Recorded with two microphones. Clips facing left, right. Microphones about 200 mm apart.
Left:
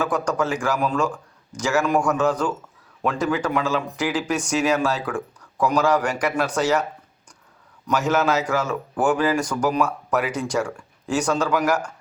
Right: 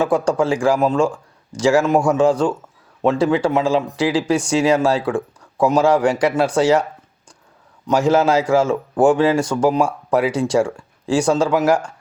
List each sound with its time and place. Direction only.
0.0 s a man's voice: 30° right (ahead or behind)
7.9 s a man's voice: 30° right (ahead or behind)